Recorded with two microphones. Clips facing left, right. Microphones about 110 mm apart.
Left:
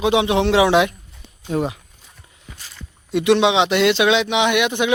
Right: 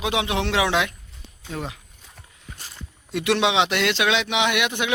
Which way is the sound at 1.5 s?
20° left (ahead or behind).